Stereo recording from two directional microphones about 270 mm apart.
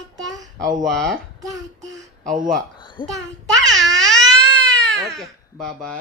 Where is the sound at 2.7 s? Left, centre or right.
Centre.